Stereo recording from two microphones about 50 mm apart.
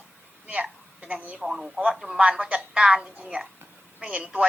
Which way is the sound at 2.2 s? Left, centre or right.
Right.